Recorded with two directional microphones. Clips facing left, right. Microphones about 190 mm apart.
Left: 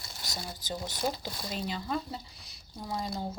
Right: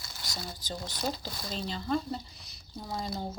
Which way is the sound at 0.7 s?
10° left (ahead or behind).